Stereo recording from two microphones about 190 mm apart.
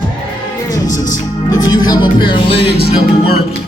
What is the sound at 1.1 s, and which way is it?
Music, 20° left (ahead or behind).